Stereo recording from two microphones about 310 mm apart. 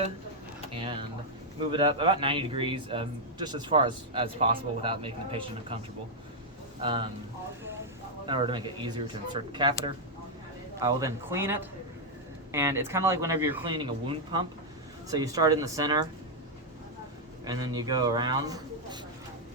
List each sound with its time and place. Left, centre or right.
0.7 s a man's voice: centre
6.8 s a man's voice: centre
8.3 s a man's voice: centre
17.4 s a man's voice: centre